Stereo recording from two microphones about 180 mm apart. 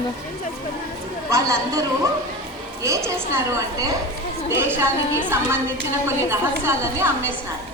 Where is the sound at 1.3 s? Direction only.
20° right (ahead or behind).